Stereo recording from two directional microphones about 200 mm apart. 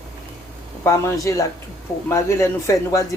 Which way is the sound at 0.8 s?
15° left (ahead or behind).